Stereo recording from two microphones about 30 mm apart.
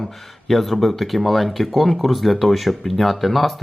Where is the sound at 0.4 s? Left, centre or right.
Centre.